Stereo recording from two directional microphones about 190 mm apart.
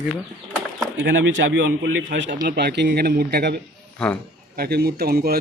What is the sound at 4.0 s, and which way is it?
Speech, 5° left (ahead or behind).